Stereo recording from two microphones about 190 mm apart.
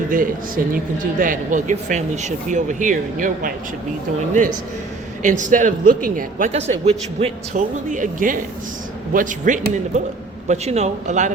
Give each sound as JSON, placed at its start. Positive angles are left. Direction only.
{"t": 0.1, "sound": "speech", "side_deg": -45}
{"t": 5.2, "sound": "speech", "side_deg": -40}